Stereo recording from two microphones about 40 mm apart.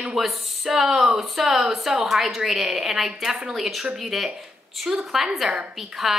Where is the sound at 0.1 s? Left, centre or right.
Centre.